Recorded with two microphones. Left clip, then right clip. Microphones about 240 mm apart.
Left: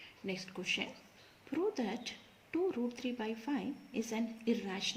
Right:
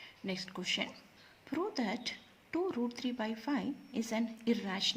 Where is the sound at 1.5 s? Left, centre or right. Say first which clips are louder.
Even; right.